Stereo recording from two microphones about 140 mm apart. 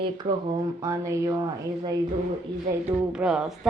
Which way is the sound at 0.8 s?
20° right (ahead or behind).